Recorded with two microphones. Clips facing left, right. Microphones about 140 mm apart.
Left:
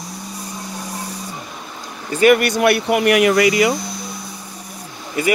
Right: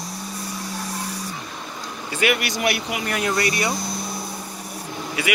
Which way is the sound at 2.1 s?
45° left (ahead or behind).